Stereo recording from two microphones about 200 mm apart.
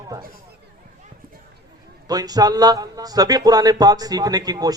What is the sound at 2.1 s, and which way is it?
A man's voice, 20° right (ahead or behind).